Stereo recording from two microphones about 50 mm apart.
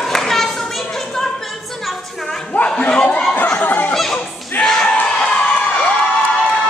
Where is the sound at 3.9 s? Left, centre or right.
Centre.